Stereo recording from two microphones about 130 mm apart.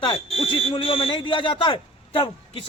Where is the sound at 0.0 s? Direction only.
45° left (ahead or behind).